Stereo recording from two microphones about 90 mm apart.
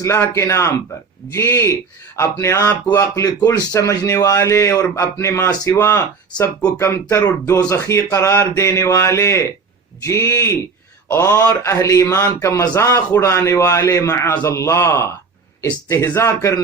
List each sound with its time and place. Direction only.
0.0 s a man's voice: 30° left (ahead or behind)